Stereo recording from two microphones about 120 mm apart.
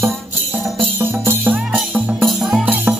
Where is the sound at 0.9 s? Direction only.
15° right (ahead or behind).